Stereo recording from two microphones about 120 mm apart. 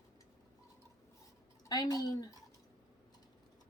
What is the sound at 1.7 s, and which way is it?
Speech, 30° left (ahead or behind).